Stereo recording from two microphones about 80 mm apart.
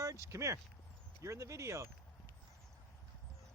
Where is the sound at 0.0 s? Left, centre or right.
Right.